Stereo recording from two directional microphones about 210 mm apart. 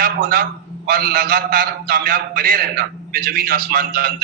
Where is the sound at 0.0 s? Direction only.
45° right (ahead or behind).